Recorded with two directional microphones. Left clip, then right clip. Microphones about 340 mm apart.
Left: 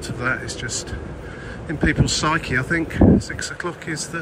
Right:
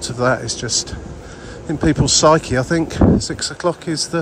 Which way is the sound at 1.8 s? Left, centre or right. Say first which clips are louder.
Right 7 dB; centre.